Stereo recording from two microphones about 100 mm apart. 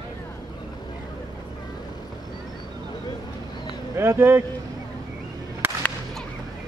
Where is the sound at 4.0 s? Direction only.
25° right (ahead or behind).